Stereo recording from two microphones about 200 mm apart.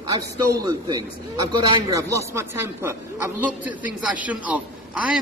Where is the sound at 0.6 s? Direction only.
20° right (ahead or behind).